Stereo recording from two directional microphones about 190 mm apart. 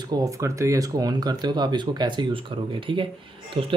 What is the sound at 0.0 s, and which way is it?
Speech, 20° right (ahead or behind).